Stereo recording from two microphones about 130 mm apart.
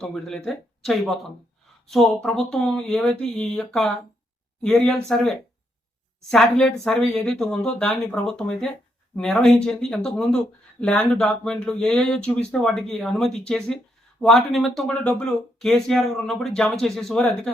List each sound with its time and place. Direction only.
0.0 s speech: 5° left (ahead or behind)